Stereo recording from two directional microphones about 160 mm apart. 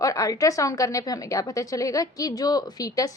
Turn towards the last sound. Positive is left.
turn(degrees=25)  # may be behind; listen again after turning